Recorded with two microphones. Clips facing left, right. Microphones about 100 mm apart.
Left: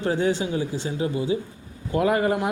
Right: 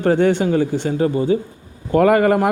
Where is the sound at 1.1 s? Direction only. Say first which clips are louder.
Right 7 dB; 40° right (ahead or behind).